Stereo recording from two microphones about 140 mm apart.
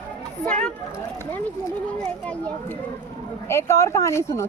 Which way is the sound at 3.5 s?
20° left (ahead or behind).